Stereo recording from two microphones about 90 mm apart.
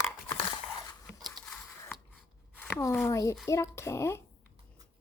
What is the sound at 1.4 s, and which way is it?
Scissors, centre (ahead or behind).